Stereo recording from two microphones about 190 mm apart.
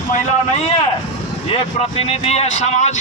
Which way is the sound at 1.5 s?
30° left (ahead or behind).